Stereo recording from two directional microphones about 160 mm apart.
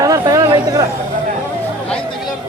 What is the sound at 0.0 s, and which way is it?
Chatter, 20° right (ahead or behind).